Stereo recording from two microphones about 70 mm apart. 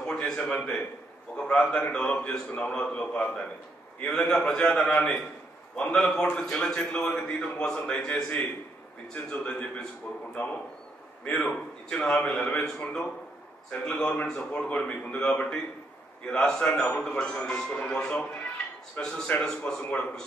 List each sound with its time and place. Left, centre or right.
0.0 s a sound: centre
0.4 s a man's voice: left
5.9 s a man's voice: centre